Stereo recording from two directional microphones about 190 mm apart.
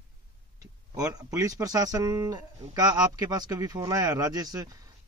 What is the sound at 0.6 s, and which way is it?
Speech, 20° right (ahead or behind).